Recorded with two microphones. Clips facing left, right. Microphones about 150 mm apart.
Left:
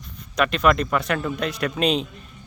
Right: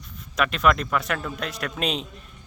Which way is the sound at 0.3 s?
Centre (ahead or behind).